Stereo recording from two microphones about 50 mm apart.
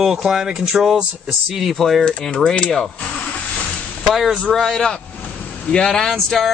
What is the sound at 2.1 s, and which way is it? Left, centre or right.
Speech, centre.